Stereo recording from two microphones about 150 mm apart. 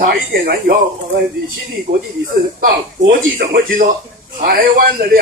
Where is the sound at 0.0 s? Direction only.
80° right.